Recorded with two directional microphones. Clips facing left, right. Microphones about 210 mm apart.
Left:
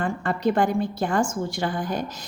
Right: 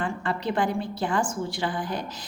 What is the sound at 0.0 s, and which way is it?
A woman's voice, 45° left (ahead or behind).